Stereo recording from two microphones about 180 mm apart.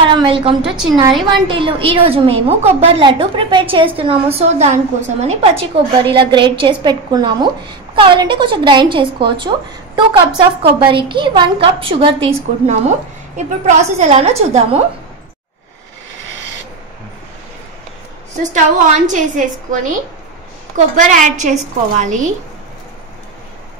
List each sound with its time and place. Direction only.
0.0 s a woman's voice: 30° right (ahead or behind)
10.9 s a woman's voice: 30° right (ahead or behind)
18.4 s a woman's voice: 45° right (ahead or behind)